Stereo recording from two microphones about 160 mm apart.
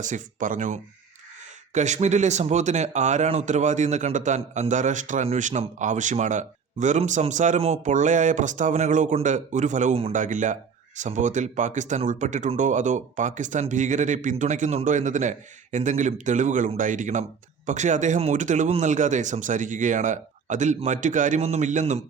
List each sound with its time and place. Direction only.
0.0 s speech: 55° right (ahead or behind)